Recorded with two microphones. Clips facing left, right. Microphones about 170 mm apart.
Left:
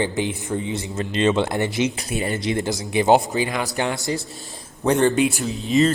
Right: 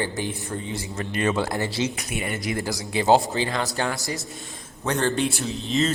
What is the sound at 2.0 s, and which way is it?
Speech, 30° left (ahead or behind).